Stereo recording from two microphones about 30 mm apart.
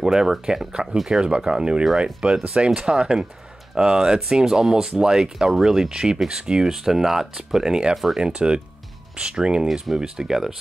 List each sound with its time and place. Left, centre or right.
0.0 s speech: centre
1.2 s speech: right
6.7 s speech: centre
8.2 s speech: right